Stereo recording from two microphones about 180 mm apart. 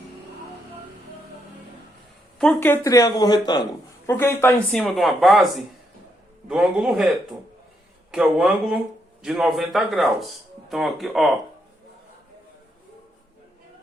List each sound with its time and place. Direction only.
2.4 s speech: 10° left (ahead or behind)
4.1 s speech: 15° left (ahead or behind)
8.1 s speech: 5° right (ahead or behind)